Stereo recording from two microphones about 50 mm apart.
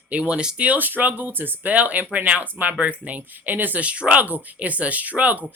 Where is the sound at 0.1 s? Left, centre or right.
Right.